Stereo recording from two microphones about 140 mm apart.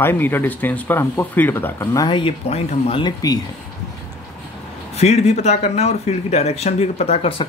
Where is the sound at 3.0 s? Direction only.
30° left (ahead or behind).